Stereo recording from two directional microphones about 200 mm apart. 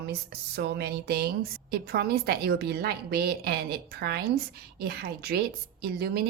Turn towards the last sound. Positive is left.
turn(degrees=-50)  # may be behind; listen again after turning